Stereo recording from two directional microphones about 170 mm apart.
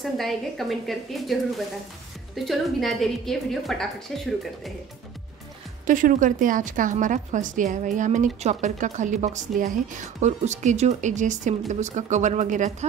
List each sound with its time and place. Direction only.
0.0 s a woman's voice: centre (ahead or behind)
5.9 s a woman's voice: 50° right (ahead or behind)